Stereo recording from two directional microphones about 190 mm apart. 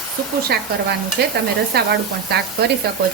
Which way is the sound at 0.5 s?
60° right (ahead or behind).